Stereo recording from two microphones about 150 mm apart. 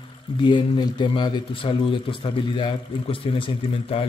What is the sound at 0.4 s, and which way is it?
A man's voice, 30° left (ahead or behind).